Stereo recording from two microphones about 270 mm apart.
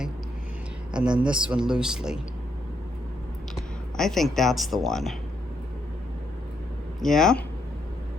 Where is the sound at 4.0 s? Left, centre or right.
Centre.